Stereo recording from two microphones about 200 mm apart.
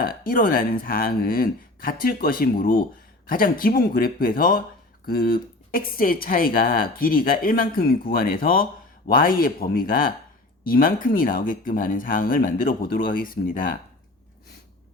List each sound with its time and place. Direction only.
0.0 s speech: 45° left (ahead or behind)